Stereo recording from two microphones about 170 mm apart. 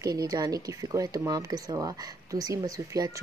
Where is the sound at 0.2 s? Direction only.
20° right (ahead or behind).